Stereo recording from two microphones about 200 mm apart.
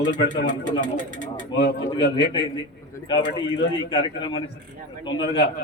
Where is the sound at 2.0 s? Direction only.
55° left (ahead or behind).